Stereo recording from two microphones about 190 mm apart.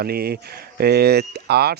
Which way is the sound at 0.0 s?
55° right (ahead or behind).